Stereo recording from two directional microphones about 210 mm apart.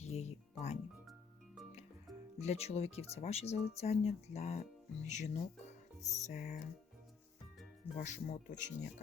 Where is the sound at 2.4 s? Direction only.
30° left (ahead or behind).